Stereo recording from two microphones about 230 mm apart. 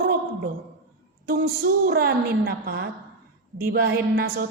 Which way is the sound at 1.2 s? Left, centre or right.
Right.